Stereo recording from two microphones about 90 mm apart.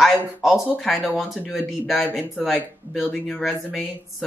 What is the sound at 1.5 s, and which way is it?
Speech, 5° right (ahead or behind).